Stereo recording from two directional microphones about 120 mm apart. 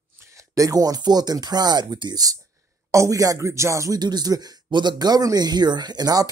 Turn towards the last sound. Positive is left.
turn(degrees=-30)  # may be behind; listen again after turning